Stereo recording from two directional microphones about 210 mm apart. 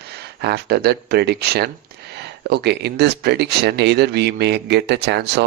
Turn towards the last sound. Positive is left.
turn(degrees=-55)  # may be behind; listen again after turning